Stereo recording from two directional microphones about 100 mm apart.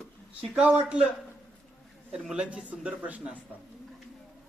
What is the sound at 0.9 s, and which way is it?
Speech, 10° right (ahead or behind).